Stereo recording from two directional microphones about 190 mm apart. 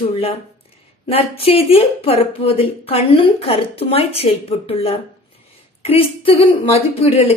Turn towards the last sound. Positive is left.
turn(degrees=30)  # may be behind; listen again after turning